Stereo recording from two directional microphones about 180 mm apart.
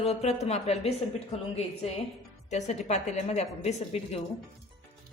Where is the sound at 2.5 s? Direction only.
40° left (ahead or behind).